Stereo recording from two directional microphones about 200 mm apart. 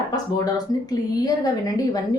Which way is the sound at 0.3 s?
20° left (ahead or behind).